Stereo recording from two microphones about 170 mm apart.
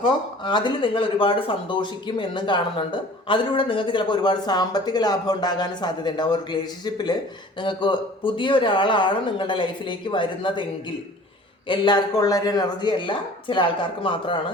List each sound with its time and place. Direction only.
0.0 s speech: 25° left (ahead or behind)